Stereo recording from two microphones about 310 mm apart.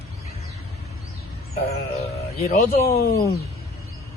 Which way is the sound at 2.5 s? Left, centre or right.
Left.